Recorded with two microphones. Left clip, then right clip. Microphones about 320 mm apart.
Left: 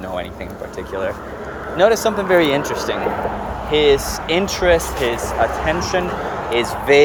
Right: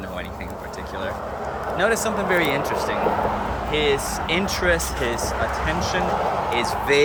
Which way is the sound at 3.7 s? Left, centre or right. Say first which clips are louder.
Left 8 dB; centre.